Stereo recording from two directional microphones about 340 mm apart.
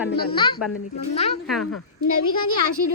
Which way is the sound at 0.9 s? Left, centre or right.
Centre.